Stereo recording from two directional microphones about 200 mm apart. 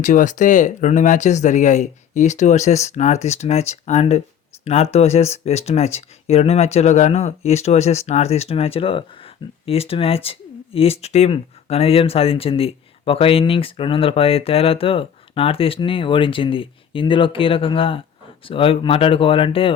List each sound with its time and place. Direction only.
0.0 s speech: 40° left (ahead or behind)